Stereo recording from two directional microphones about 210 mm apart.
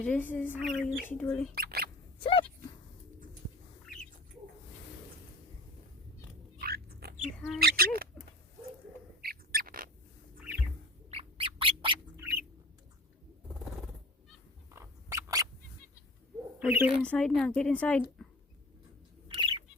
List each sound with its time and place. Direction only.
0.0 s speech: 10° left (ahead or behind)
0.6 s a woman's voice: centre (ahead or behind)
1.5 s speech: 45° right (ahead or behind)
2.2 s speech: 25° left (ahead or behind)
6.6 s rodents: 45° right (ahead or behind)
7.6 s speech: 45° right (ahead or behind)
9.2 s bird: 45° right (ahead or behind)
11.1 s bird: 25° right (ahead or behind)
12.1 s bird: 10° right (ahead or behind)
14.7 s a sound: 15° right (ahead or behind)
16.6 s owl: 10° right (ahead or behind)
17.0 s a woman's voice: 5° left (ahead or behind)
19.3 s squawk: 25° right (ahead or behind)